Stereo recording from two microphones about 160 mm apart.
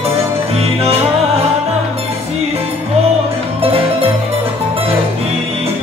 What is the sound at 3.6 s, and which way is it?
Music, 40° right (ahead or behind).